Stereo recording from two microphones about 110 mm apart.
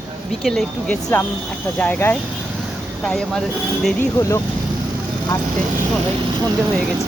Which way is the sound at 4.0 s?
25° left (ahead or behind).